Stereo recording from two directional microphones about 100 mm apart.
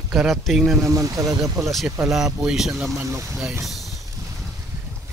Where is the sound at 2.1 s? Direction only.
5° right (ahead or behind).